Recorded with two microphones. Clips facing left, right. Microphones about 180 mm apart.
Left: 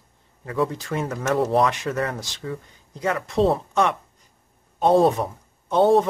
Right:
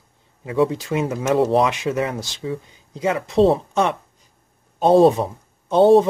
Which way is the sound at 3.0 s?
20° right (ahead or behind).